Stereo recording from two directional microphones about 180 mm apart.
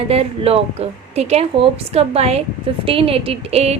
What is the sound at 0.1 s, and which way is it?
A woman's voice, 35° right (ahead or behind).